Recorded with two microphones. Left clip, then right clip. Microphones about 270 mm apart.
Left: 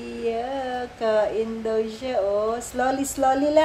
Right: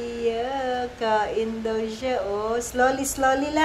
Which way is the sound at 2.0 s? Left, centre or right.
Centre.